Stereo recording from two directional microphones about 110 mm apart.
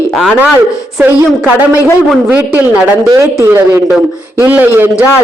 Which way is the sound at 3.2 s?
25° right (ahead or behind).